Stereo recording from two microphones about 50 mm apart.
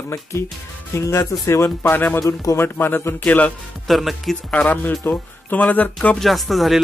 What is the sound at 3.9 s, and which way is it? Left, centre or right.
Speech, centre.